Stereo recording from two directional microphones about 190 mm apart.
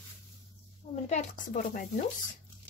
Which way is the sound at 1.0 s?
40° left (ahead or behind).